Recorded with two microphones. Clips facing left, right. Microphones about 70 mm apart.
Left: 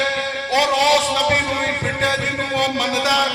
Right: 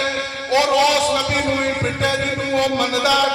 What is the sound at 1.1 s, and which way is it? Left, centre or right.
Music, left.